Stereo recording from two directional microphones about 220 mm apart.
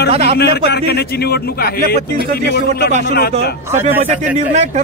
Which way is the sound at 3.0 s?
45° left (ahead or behind).